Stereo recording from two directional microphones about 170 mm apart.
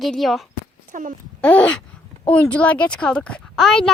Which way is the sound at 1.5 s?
5° left (ahead or behind).